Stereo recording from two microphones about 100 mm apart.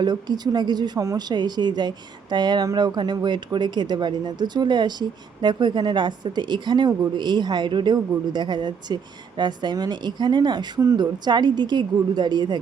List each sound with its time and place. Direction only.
0.0 s speech: 45° right (ahead or behind)